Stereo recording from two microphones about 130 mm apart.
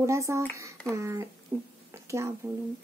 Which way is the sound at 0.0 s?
25° right (ahead or behind).